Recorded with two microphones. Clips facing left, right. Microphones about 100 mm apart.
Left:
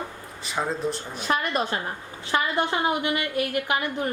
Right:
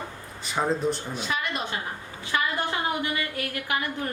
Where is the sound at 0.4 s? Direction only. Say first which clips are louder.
Right 2 dB; centre (ahead or behind).